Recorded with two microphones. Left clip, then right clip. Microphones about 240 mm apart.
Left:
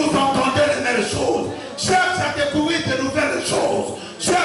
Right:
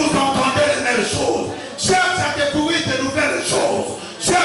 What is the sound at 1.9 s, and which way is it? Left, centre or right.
Speech, centre.